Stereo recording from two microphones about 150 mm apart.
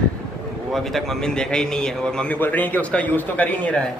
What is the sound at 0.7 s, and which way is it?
A man's voice, centre (ahead or behind).